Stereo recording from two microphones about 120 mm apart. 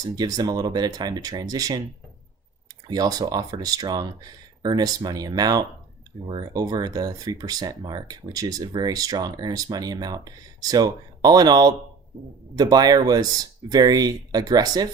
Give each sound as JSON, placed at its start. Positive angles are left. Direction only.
{"t": 0.0, "sound": "speech", "side_deg": -30}
{"t": 2.8, "sound": "speech", "side_deg": -30}